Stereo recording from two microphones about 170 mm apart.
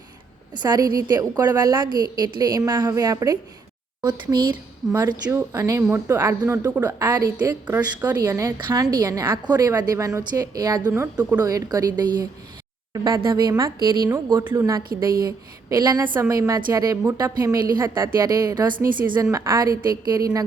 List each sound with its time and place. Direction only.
0.5 s a woman's voice: 25° right (ahead or behind)